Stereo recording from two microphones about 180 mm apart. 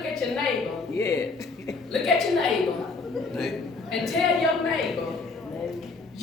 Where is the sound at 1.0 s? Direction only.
15° left (ahead or behind).